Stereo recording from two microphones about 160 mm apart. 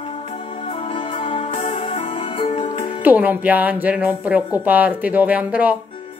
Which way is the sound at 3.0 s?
10° right (ahead or behind).